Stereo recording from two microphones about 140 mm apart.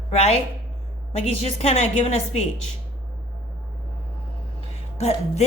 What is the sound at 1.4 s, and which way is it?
A woman's voice, 50° left (ahead or behind).